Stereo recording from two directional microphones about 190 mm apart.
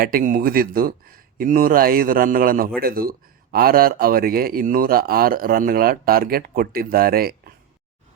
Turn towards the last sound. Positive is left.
turn(degrees=-50)  # may be behind; listen again after turning